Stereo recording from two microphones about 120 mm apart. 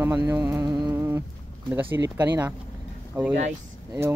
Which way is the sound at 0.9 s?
20° right (ahead or behind).